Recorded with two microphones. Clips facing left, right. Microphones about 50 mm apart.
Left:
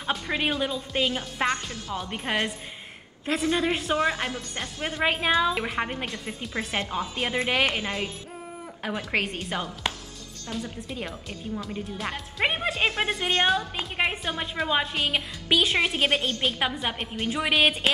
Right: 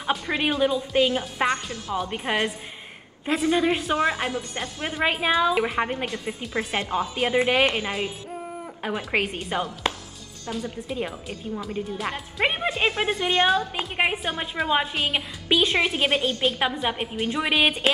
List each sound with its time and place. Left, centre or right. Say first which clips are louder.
0.0 s speech: right 2 dB; centre
7.7 s chopping: right 2 dB; centre
10.5 s speech: right 4 dB; centre
13.7 s chopping: right 3 dB; centre
14.3 s speech: right 2 dB; centre